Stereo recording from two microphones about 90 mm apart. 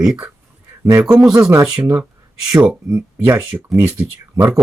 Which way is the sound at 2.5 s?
15° right (ahead or behind).